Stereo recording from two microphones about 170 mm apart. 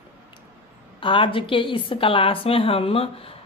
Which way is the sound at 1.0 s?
30° left (ahead or behind).